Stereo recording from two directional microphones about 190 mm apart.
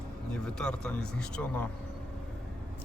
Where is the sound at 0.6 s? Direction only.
5° left (ahead or behind).